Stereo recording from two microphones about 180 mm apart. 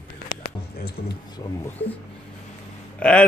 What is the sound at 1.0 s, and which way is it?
Speech, 60° left (ahead or behind).